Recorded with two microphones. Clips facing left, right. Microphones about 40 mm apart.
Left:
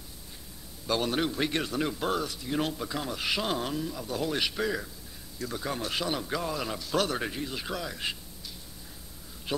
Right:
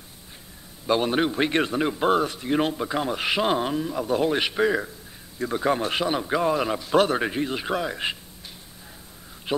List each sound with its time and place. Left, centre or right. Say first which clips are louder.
0.8 s a man's voice: right 6 dB; right